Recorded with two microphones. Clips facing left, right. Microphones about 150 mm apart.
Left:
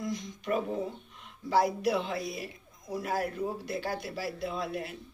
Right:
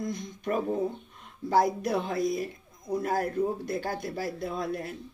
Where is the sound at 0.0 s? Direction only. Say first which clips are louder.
Right 2 dB; 50° right (ahead or behind).